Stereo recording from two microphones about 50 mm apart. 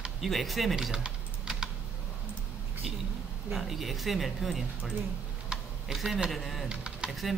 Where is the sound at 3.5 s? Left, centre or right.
Centre.